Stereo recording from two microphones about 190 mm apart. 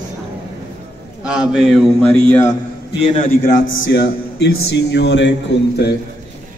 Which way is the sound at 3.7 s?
65° left (ahead or behind).